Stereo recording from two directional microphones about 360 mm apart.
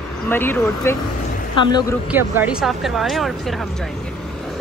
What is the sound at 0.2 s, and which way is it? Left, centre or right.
Speech, centre.